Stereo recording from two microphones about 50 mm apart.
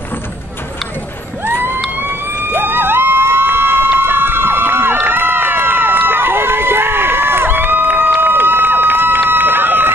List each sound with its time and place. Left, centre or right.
2.0 s vehicle: right
5.0 s run: right